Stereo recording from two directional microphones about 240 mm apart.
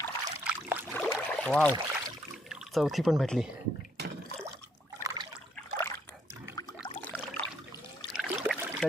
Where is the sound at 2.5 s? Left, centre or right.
Centre.